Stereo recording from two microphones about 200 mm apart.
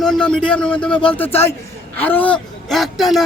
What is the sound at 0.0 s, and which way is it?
A man's voice, 5° left (ahead or behind).